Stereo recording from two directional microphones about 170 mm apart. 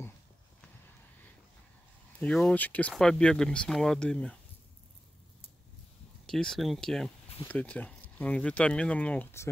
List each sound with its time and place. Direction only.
2.1 s speech: 5° left (ahead or behind)
6.2 s speech: 5° left (ahead or behind)